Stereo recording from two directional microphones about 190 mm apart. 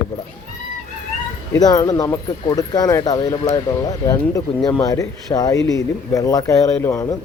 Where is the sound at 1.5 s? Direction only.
20° left (ahead or behind).